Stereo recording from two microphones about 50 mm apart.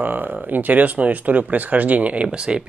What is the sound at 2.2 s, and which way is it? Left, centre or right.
Speech, centre.